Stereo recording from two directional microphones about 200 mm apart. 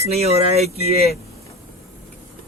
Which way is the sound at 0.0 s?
30° right (ahead or behind).